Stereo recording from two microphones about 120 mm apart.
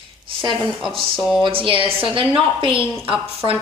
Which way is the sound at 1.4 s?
45° right (ahead or behind).